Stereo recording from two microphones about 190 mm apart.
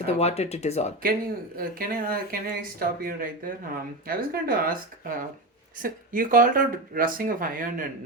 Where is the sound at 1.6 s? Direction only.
50° right (ahead or behind).